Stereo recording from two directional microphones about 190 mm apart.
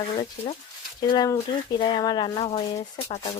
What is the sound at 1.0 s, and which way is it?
Speech, 20° left (ahead or behind).